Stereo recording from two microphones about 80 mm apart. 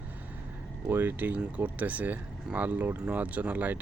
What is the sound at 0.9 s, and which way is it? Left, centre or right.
Speech, right.